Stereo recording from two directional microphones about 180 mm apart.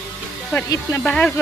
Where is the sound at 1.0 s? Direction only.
5° left (ahead or behind).